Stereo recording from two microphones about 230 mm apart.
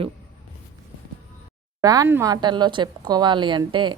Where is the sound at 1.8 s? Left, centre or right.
Centre.